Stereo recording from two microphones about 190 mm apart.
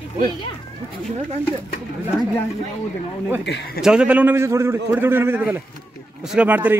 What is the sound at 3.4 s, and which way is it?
Speech, 55° left (ahead or behind).